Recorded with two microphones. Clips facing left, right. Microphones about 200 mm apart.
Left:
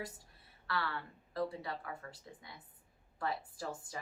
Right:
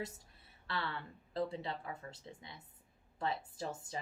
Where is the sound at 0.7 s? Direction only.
25° right (ahead or behind).